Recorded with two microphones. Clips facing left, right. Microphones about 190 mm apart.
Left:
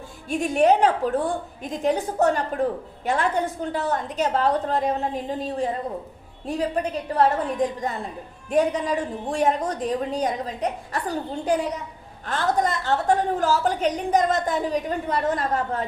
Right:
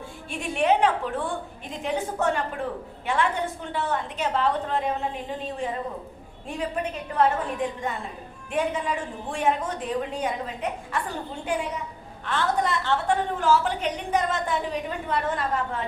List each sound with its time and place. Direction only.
0.3 s a woman's voice: 40° left (ahead or behind)